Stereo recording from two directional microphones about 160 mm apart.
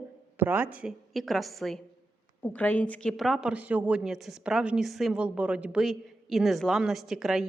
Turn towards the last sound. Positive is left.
turn(degrees=0)  # may be behind; listen again after turning